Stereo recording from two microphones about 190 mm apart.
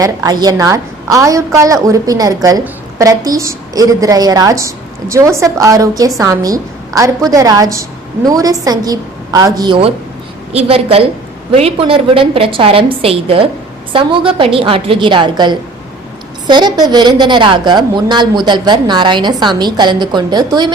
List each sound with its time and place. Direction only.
0.0 s a woman's voice: 20° right (ahead or behind)